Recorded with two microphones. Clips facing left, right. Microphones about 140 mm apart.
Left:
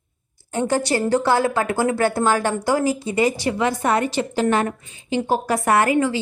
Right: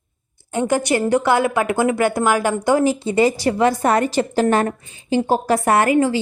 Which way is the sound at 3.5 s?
40° right (ahead or behind).